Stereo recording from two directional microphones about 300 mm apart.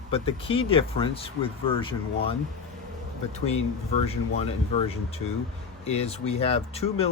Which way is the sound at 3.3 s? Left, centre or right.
Left.